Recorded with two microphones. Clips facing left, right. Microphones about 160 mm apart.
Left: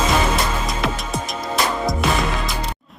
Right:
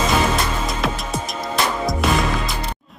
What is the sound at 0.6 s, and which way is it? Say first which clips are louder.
Music: even; centre (ahead or behind).